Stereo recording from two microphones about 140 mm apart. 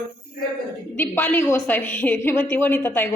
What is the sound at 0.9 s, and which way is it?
A woman's voice, 15° left (ahead or behind).